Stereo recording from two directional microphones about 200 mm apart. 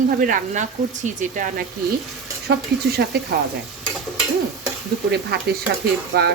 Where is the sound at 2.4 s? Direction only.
55° right (ahead or behind).